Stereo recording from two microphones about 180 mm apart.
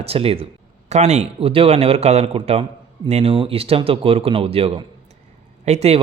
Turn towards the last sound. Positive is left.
turn(degrees=-35)  # may be behind; listen again after turning